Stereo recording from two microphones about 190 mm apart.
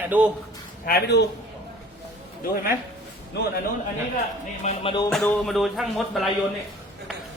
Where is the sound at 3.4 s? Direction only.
65° left (ahead or behind).